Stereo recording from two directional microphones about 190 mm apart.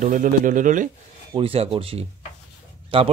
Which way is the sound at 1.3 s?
30° right (ahead or behind).